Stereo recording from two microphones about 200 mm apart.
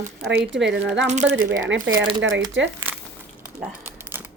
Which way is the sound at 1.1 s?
35° right (ahead or behind).